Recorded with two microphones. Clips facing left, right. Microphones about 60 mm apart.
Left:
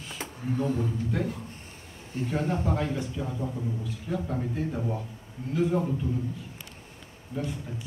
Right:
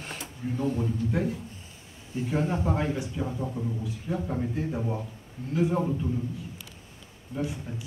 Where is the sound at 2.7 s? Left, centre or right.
Right.